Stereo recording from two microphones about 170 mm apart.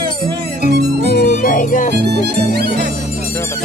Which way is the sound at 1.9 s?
75° right (ahead or behind).